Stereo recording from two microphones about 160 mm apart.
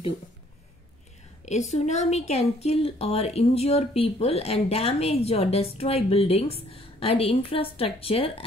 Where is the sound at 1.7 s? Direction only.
45° left (ahead or behind).